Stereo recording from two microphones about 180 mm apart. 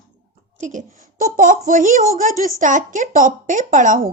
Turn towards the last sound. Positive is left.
turn(degrees=-45)  # may be behind; listen again after turning